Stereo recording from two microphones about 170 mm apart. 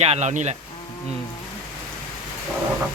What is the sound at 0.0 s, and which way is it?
Speech, 40° right (ahead or behind).